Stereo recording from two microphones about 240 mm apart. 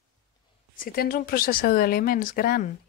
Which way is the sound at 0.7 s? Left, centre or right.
Left.